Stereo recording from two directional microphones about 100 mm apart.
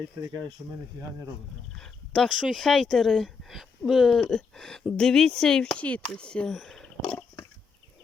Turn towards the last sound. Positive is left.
turn(degrees=5)  # may be behind; listen again after turning